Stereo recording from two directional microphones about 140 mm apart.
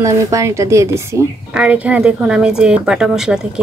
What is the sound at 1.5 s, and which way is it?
A woman's voice, 10° right (ahead or behind).